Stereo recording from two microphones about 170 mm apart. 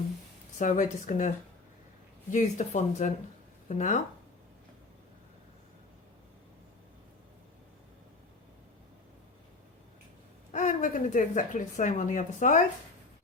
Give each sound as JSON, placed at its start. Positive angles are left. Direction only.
{"t": 0.6, "sound": "speech", "side_deg": 45}
{"t": 2.3, "sound": "speech", "side_deg": 45}
{"t": 10.5, "sound": "speech", "side_deg": 45}